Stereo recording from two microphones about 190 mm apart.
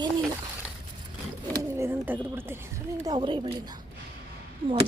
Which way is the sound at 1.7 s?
10° right (ahead or behind).